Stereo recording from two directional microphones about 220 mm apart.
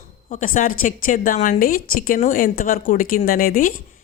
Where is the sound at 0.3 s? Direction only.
35° left (ahead or behind).